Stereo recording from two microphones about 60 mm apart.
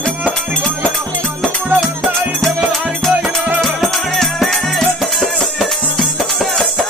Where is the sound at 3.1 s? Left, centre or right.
Right.